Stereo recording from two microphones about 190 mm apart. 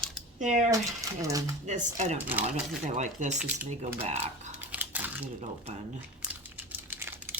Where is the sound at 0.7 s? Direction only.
15° right (ahead or behind).